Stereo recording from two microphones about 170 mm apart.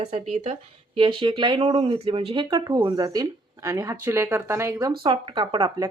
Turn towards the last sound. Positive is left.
turn(degrees=-30)  # may be behind; listen again after turning